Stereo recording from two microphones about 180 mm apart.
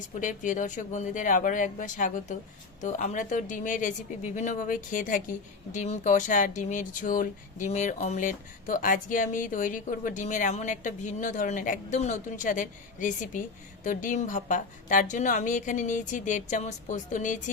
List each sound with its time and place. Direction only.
0.2 s speech: 45° left (ahead or behind)